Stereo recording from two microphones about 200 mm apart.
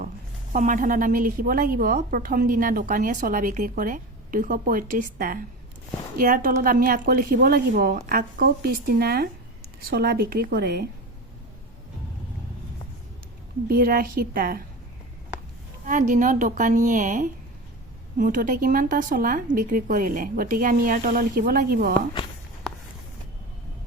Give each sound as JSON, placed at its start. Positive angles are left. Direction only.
{"t": 0.5, "sound": "a woman's voice", "side_deg": -40}
{"t": 13.7, "sound": "a woman's voice", "side_deg": -45}
{"t": 15.9, "sound": "a woman's voice", "side_deg": -40}